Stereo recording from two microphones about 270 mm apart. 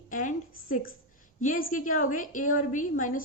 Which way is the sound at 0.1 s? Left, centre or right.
Left.